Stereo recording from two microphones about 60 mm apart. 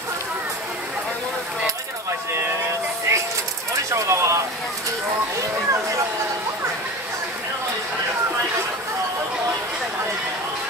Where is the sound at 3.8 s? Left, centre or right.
Right.